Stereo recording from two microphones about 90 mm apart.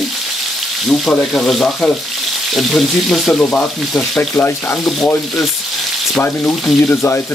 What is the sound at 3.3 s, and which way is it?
Speech, 15° left (ahead or behind).